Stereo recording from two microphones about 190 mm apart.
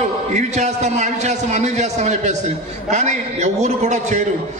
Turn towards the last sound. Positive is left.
turn(degrees=-35)  # may be behind; listen again after turning